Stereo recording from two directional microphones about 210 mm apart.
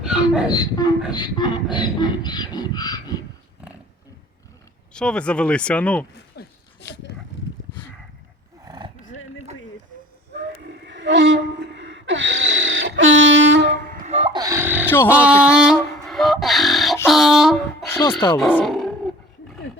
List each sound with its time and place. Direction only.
0.0 s a sound: 5° right (ahead or behind)
0.5 s speech: 20° left (ahead or behind)
4.9 s speech: 5° left (ahead or behind)
6.3 s dog: 50° left (ahead or behind)
8.6 s roar: 20° right (ahead or behind)
10.3 s a sound: 55° right (ahead or behind)
13.9 s a sound: 35° right (ahead or behind); by 14.8 s 10° right (ahead or behind)
14.8 s speech: 10° left (ahead or behind)
15.3 s speech: 5° right (ahead or behind)
16.0 s beatboxing: centre (ahead or behind)
17.1 s speech: centre (ahead or behind)
17.8 s music: 10° left (ahead or behind)
18.3 s speech: centre (ahead or behind)